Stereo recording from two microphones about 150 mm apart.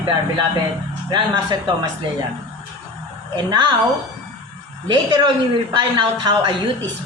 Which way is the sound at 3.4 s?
30° right (ahead or behind).